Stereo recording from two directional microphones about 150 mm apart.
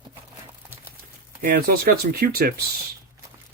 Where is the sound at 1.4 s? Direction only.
80° right.